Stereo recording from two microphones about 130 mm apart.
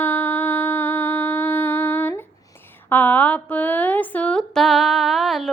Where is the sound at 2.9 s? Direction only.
15° left (ahead or behind).